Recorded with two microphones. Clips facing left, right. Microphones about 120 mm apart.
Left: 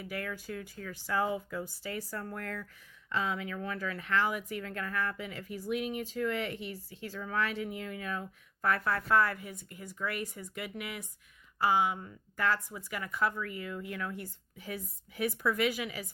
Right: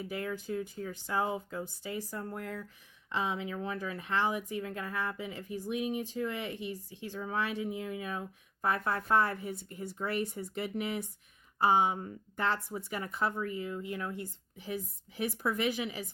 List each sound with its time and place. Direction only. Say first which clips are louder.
0.0 s speech: right 2 dB; 25° right (ahead or behind)